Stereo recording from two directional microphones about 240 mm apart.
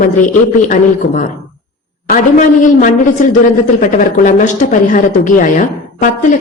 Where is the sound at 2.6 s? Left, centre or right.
Left.